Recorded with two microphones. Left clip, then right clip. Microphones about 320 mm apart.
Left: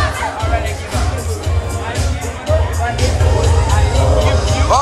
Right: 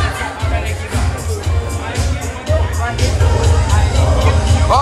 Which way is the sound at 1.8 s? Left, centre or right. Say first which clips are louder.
Left 1 dB; centre.